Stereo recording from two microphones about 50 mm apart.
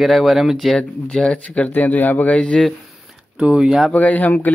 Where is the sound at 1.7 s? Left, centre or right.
Left.